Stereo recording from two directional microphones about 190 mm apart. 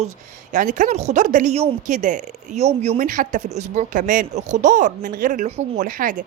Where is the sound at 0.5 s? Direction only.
40° right (ahead or behind).